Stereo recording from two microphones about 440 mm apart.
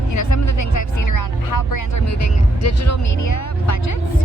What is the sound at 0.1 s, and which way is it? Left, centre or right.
Music, left.